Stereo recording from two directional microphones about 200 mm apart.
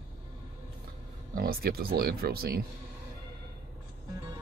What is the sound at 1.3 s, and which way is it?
Speech, 50° right (ahead or behind).